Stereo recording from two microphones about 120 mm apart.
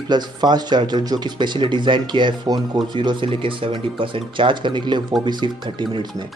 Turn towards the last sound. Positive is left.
turn(degrees=-40)  # may be behind; listen again after turning